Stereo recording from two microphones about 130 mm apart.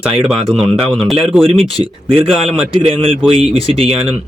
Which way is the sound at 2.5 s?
45° right (ahead or behind).